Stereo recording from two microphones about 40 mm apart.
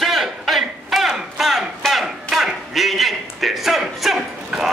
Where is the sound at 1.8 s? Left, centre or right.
Centre.